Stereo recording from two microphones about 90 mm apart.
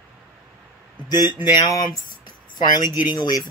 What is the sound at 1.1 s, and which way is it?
Speech, 55° left (ahead or behind).